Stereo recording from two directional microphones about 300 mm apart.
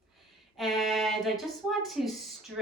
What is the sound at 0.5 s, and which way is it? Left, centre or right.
Speech, centre.